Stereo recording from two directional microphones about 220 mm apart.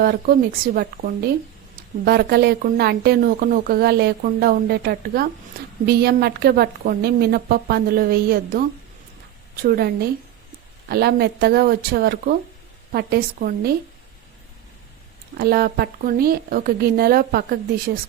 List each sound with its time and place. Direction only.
0.0 s speech: 40° right (ahead or behind)
15.4 s speech: 45° right (ahead or behind)